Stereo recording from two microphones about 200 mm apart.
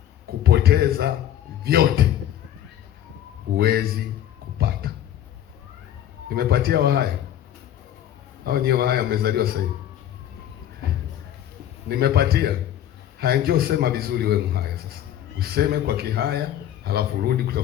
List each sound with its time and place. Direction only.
0.3 s a sound: 50° right (ahead or behind)
1.6 s speech: 50° right (ahead or behind)
3.5 s speech: 50° right (ahead or behind)
4.5 s a sound: 50° right (ahead or behind)
6.2 s speech: 50° right (ahead or behind)
8.4 s speech: 50° right (ahead or behind)
11.9 s speech: 50° right (ahead or behind)